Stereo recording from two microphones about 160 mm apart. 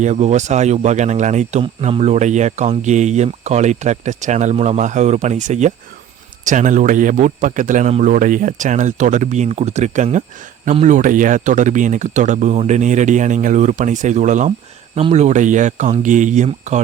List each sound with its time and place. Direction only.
0.0 s speech: 45° right (ahead or behind)